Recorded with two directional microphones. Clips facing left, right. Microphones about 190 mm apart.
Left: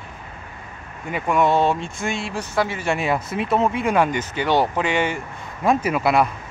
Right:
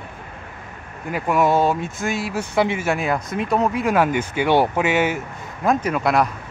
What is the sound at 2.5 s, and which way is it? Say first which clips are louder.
Speech: right 3 dB; 15° right (ahead or behind).